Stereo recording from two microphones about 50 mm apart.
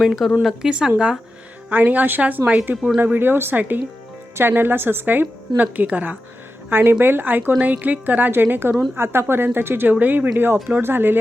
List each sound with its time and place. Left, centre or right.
0.0 s speech: centre
0.6 s speech: centre
1.7 s a woman's voice: right
3.5 s a woman's voice: right
4.4 s a woman's voice: right
6.7 s a woman's voice: right
9.9 s a woman's voice: right